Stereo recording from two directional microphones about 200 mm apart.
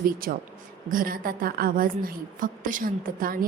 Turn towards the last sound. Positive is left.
turn(degrees=-45)  # may be behind; listen again after turning